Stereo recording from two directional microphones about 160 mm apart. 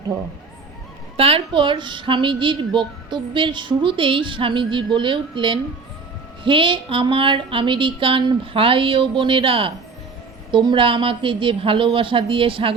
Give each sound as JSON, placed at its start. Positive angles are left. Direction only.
{"t": 1.1, "sound": "a woman's voice", "side_deg": -35}